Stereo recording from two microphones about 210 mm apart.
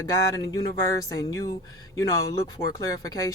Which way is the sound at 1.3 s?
15° left (ahead or behind).